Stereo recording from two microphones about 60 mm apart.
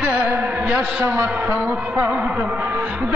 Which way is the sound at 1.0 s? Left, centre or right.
Right.